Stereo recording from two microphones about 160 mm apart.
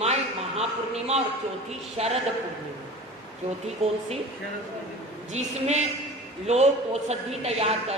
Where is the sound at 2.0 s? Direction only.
40° right (ahead or behind).